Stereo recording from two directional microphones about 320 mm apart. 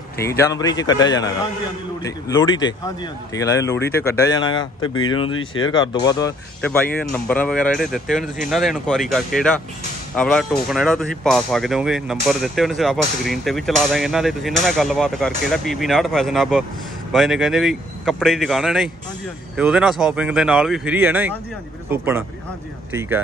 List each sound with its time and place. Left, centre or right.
0.4 s speech: centre
22.9 s speech: centre